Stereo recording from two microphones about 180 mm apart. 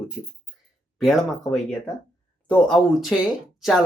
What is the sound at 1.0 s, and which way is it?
Speech, centre (ahead or behind).